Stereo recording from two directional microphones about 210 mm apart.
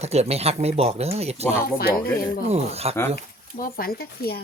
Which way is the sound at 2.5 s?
30° right (ahead or behind).